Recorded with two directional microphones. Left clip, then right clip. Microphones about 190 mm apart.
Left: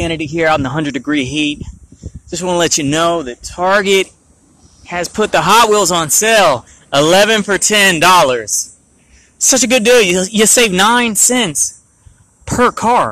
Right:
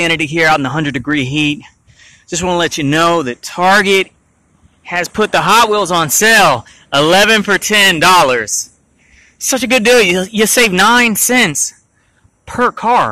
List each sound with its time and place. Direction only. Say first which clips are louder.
0.0 s speech: right 3 dB; 10° right (ahead or behind)
2.2 s speech: right 2 dB; 15° right (ahead or behind)
2.5 s speech: left 1 dB; centre (ahead or behind)
3.0 s speech: right 6 dB; 20° right (ahead or behind)
3.8 s speech: right 1 dB; centre (ahead or behind)
6.2 s speech: right 2 dB; 10° right (ahead or behind)
9.4 s speech: left 1 dB; centre (ahead or behind)
12.4 s speech: left 1 dB; 5° left (ahead or behind)